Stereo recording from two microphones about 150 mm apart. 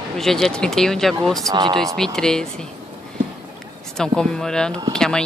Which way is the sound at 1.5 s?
30° right (ahead or behind).